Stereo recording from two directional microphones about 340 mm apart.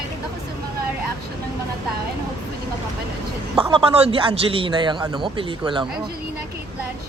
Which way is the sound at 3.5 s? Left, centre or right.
Centre.